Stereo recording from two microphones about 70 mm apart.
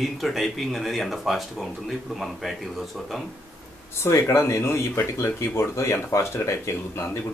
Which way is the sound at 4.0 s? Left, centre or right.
Left.